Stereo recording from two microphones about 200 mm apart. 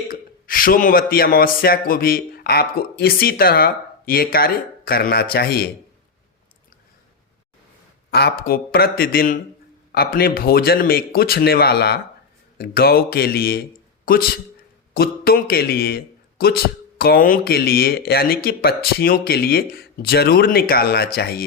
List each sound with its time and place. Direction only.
0.1 s a man's voice: 45° left (ahead or behind)
8.1 s speech: 50° left (ahead or behind)